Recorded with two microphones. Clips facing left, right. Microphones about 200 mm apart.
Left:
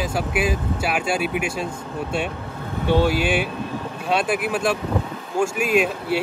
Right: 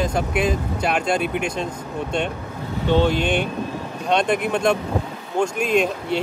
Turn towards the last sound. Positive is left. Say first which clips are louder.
# even
turn(degrees=5)  # may be behind; listen again after turning